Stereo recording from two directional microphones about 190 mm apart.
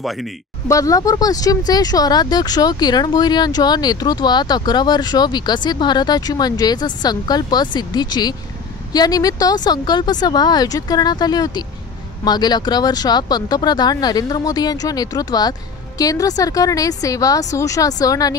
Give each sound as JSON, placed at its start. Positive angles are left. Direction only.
{"t": 0.0, "sound": "speech", "side_deg": 0}
{"t": 0.7, "sound": "speech", "side_deg": 15}